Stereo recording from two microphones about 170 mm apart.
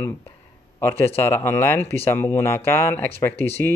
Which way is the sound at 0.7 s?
15° left (ahead or behind).